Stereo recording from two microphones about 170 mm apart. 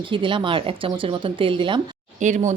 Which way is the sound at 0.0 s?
30° right (ahead or behind).